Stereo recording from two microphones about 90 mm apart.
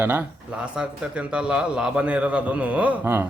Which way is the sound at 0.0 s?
20° right (ahead or behind).